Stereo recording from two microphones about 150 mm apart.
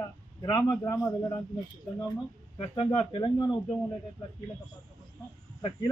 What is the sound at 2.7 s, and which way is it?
Speech, 35° left (ahead or behind).